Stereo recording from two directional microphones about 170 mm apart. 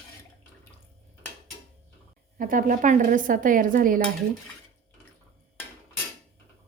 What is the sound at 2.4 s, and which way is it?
A woman's voice, 55° right (ahead or behind).